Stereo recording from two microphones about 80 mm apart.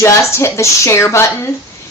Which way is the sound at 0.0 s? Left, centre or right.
Left.